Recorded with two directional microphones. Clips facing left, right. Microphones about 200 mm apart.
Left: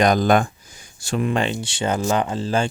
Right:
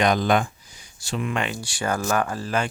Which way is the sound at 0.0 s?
40° left (ahead or behind).